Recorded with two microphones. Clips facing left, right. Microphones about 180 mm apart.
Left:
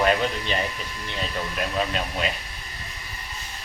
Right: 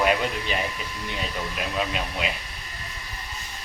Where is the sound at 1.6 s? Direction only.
5° right (ahead or behind).